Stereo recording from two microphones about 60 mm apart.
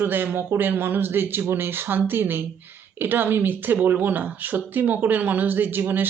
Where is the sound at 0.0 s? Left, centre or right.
Right.